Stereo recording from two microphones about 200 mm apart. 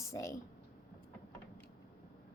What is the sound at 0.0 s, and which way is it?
Speech, 15° left (ahead or behind).